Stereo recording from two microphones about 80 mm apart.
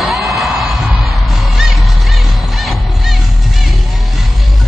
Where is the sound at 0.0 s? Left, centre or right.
Centre.